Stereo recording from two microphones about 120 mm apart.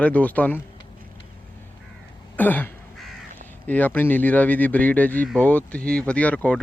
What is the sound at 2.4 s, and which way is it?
Speech, 15° left (ahead or behind).